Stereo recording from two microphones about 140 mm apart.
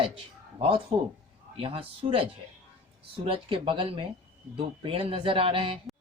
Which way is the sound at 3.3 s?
40° right (ahead or behind).